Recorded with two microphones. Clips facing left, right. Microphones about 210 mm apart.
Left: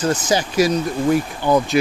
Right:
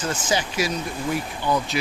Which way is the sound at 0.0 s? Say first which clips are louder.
Left 6 dB; 40° left (ahead or behind).